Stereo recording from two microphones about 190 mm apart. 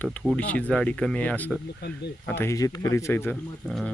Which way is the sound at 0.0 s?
5° left (ahead or behind).